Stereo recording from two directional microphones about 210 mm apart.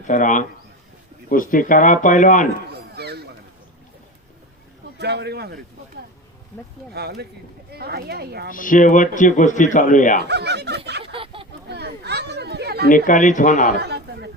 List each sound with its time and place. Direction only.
0.1 s speech: 35° left (ahead or behind)
2.7 s chop: 50° right (ahead or behind)
4.9 s speech: 55° right (ahead or behind)
6.9 s speech: 50° right (ahead or behind)
8.5 s speech: 40° left (ahead or behind)
10.2 s a sound: 55° right (ahead or behind)
11.0 s a sound: 25° right (ahead or behind)
11.7 s children playing: 50° right (ahead or behind)
12.9 s speech: 35° left (ahead or behind)
13.7 s a sound: 50° right (ahead or behind)